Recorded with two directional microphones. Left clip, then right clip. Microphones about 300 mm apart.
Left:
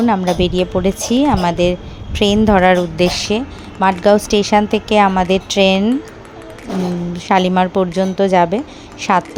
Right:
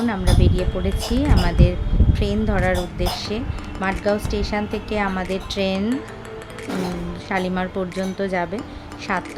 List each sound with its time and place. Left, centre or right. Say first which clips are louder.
0.0 s a woman's voice: left 8 dB; left
7.3 s a woman's voice: left 11 dB; left